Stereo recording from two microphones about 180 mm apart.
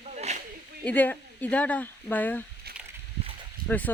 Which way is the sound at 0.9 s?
10° left (ahead or behind).